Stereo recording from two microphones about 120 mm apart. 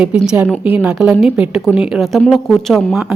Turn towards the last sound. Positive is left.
turn(degrees=0)  # may be behind; listen again after turning